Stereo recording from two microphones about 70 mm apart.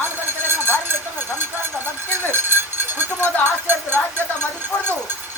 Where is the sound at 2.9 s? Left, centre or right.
Right.